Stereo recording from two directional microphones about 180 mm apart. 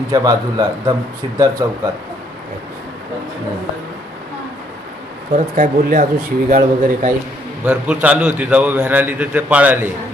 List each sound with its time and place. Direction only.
0.1 s a man's voice: 20° right (ahead or behind)
5.3 s speech: 50° right (ahead or behind)
7.6 s a man's voice: 5° right (ahead or behind)